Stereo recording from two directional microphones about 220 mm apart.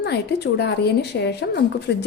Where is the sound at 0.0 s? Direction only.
50° left (ahead or behind).